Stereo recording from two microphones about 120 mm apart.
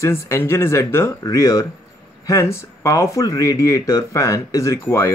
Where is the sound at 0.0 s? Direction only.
25° left (ahead or behind).